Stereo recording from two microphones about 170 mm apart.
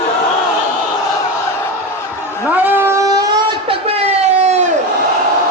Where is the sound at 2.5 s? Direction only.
10° right (ahead or behind); by 4.7 s 40° right (ahead or behind).